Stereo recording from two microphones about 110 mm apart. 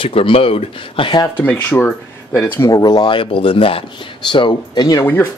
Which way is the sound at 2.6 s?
35° left (ahead or behind).